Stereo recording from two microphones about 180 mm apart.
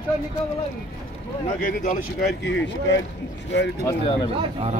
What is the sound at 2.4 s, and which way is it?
Speech, 85° left.